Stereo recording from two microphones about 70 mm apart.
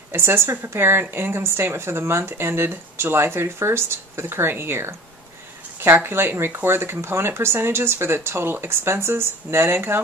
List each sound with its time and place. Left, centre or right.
0.1 s speech: right